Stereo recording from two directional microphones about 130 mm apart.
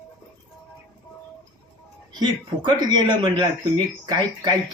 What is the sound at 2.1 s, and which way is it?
Speech, 35° right (ahead or behind).